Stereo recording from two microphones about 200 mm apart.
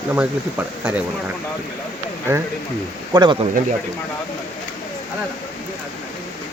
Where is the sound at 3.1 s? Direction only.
25° right (ahead or behind).